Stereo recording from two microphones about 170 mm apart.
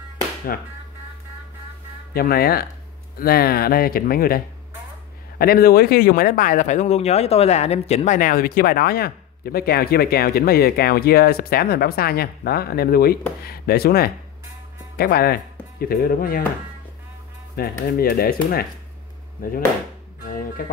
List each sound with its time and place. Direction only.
0.5 s speech: 60° left (ahead or behind)
2.1 s speech: 60° left (ahead or behind)
5.4 s speech: 60° left (ahead or behind)
17.6 s speech: 65° left (ahead or behind)
20.2 s music: 55° left (ahead or behind)